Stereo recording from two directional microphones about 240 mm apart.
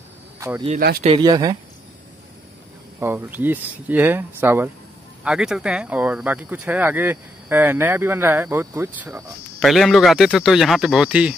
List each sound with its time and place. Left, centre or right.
0.4 s speech: centre
0.7 s speech: right
1.0 s speech: centre
3.0 s speech: centre